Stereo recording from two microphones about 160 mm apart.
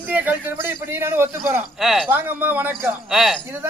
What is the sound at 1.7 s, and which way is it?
Speech, centre (ahead or behind).